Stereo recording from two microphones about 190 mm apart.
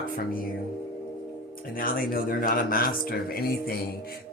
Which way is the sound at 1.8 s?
50° left (ahead or behind).